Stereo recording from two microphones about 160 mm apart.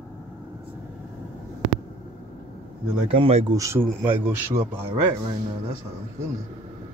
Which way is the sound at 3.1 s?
40° right (ahead or behind).